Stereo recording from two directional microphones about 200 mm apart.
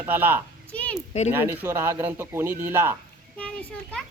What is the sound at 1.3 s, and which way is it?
Speech, 10° right (ahead or behind).